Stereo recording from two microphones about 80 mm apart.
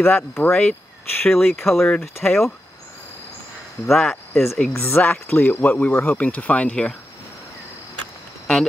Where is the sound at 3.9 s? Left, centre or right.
Centre.